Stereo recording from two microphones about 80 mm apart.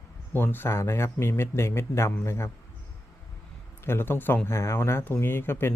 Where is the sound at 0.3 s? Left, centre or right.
Left.